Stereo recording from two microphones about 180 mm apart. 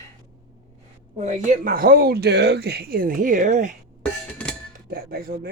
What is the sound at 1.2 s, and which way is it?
Speech, 40° right (ahead or behind).